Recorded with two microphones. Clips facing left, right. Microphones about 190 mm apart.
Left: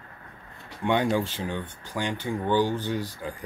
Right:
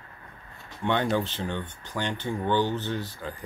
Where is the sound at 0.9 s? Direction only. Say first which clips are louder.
Left 2 dB; 10° left (ahead or behind).